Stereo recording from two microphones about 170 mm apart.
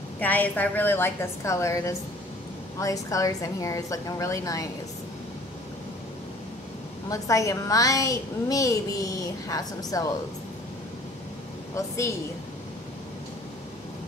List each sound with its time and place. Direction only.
0.2 s a woman's voice: 10° left (ahead or behind)
7.1 s a woman's voice: 20° left (ahead or behind)